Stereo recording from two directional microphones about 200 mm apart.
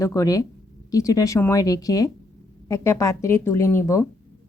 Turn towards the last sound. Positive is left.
turn(degrees=15)  # may be behind; listen again after turning